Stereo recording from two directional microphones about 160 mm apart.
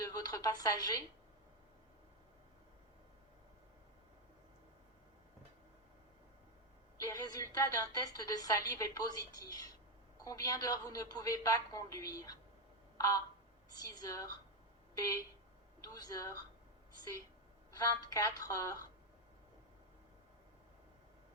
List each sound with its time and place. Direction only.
0.0 s a woman's voice: 25° left (ahead or behind)
7.0 s a woman's voice: 20° left (ahead or behind)
13.0 s a sound: 20° left (ahead or behind)
13.7 s a woman's voice: 25° left (ahead or behind)
17.7 s a woman's voice: 20° left (ahead or behind)